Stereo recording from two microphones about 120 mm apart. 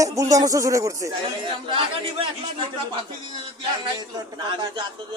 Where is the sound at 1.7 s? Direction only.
50° right (ahead or behind).